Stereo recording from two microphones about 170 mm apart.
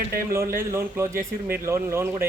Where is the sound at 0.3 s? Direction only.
15° right (ahead or behind).